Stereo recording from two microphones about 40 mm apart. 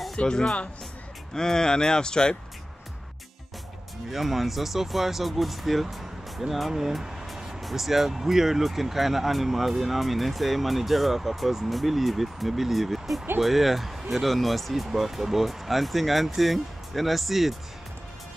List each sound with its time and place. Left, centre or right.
0.1 s speech: left
4.1 s speech: centre
6.7 s vehicle: centre
7.6 s speech: centre